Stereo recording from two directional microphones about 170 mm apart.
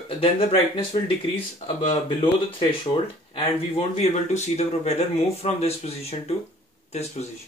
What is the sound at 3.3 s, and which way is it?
Speech, 40° left (ahead or behind).